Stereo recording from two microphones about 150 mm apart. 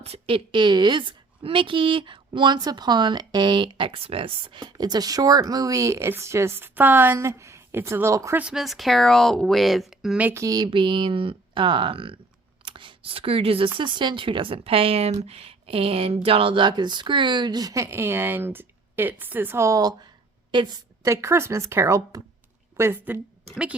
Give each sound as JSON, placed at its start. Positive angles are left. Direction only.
{"t": 0.0, "sound": "a woman's voice", "side_deg": -40}
{"t": 8.4, "sound": "a woman's voice", "side_deg": -5}